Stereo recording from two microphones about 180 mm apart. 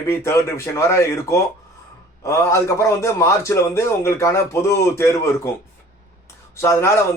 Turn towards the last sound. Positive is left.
turn(degrees=15)  # may be behind; listen again after turning